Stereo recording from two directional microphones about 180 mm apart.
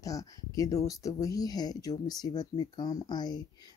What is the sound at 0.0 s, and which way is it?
Speech, 20° left (ahead or behind).